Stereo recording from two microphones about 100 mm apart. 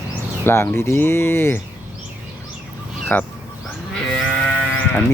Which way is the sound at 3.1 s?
15° left (ahead or behind).